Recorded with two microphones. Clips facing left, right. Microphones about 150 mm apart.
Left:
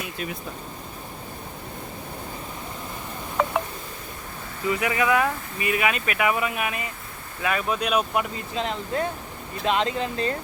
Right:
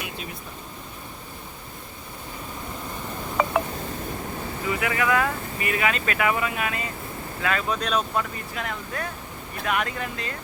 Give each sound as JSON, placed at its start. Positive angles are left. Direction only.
{"t": 3.4, "sound": "telephone dialing", "side_deg": 0}
{"t": 4.7, "sound": "speech", "side_deg": 20}